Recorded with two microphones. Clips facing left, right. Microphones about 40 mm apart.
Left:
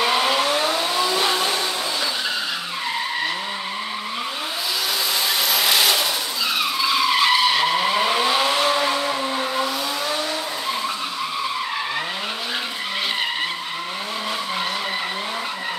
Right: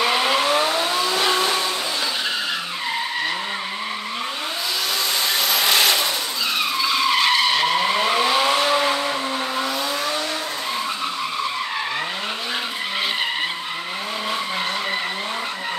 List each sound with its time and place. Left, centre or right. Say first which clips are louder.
0.0 s vehicle: even; centre
5.5 s vehicle: right 1 dB; centre